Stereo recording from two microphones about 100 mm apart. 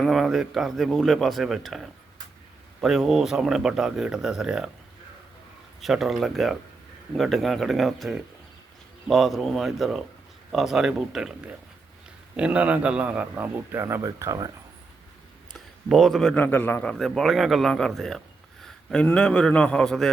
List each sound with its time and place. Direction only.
0.0 s speech: centre (ahead or behind)
5.8 s speech: centre (ahead or behind)
12.4 s a man's voice: 15° right (ahead or behind); by 14.5 s 35° right (ahead or behind)
15.5 s a sound: centre (ahead or behind)
16.3 s a man's voice: 20° left (ahead or behind)
16.9 s speech: centre (ahead or behind)
18.6 s a sound: 10° left (ahead or behind)
19.1 s a man's voice: 5° left (ahead or behind)